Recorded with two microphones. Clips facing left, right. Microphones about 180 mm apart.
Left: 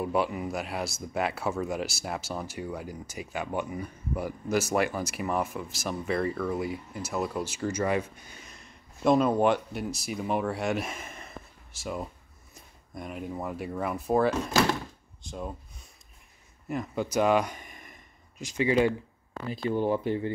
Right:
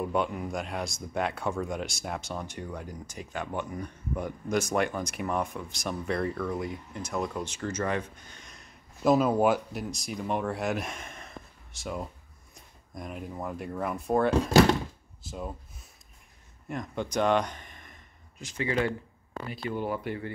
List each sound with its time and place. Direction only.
0.0 s speech: 5° left (ahead or behind)
16.6 s speech: 5° left (ahead or behind); by 20.3 s 25° left (ahead or behind)